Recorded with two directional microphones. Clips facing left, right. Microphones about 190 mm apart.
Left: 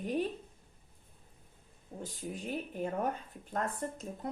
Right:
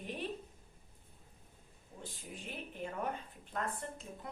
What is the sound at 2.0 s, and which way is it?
A woman's voice, 40° left (ahead or behind).